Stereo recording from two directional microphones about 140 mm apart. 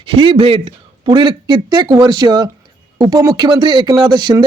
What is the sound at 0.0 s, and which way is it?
Speech, 40° right (ahead or behind).